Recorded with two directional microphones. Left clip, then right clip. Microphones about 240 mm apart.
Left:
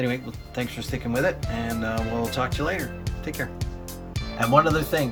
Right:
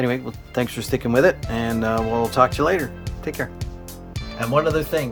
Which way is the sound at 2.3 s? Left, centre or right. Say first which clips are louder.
Right 9 dB; centre.